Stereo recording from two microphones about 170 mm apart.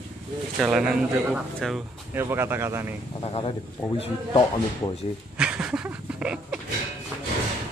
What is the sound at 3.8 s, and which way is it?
Speech, 10° left (ahead or behind).